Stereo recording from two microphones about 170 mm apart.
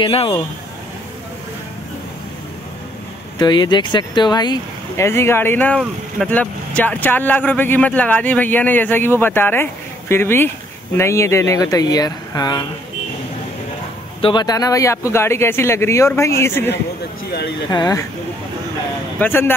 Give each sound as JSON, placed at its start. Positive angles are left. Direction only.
{"t": 0.0, "sound": "speech", "side_deg": 35}
{"t": 3.3, "sound": "speech", "side_deg": 25}
{"t": 14.2, "sound": "speech", "side_deg": 25}
{"t": 19.1, "sound": "speech", "side_deg": 10}